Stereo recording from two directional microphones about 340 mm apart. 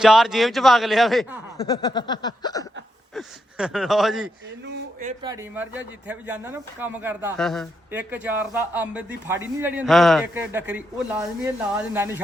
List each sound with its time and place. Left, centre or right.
0.0 s speech: centre
3.2 s speech: centre
4.6 s a sound: right
5.2 s speech: centre